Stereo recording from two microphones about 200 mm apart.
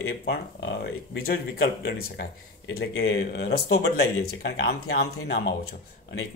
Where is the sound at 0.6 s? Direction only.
55° left (ahead or behind).